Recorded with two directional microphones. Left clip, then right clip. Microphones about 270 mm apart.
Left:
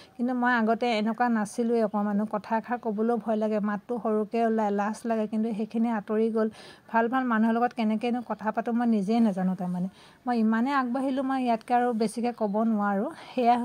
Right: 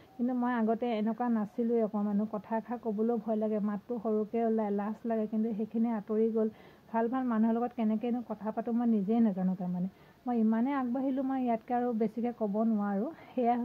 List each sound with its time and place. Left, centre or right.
0.3 s speech: centre